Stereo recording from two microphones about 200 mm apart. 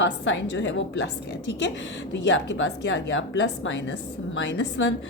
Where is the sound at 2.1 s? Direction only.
65° left (ahead or behind).